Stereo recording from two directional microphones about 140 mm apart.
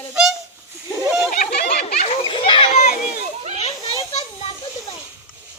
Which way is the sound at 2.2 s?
35° left (ahead or behind).